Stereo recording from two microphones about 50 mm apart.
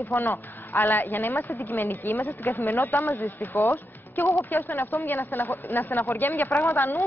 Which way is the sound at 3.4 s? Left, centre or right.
Left.